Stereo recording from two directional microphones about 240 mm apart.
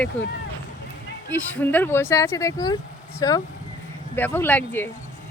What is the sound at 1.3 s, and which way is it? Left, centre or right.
Speech, centre.